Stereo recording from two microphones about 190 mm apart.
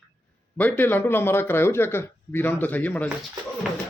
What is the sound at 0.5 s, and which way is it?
A man's voice, 10° left (ahead or behind).